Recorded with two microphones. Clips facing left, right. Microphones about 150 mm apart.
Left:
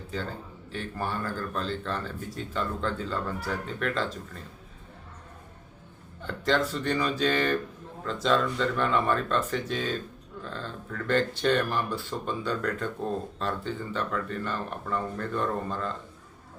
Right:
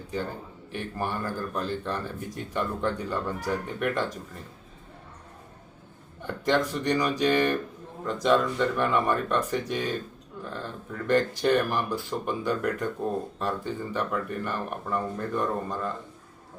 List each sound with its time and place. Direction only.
0.1 s speech: 15° right (ahead or behind)
6.2 s speech: 15° right (ahead or behind)